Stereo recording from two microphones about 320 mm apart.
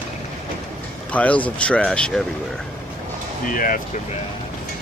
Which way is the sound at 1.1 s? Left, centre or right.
Centre.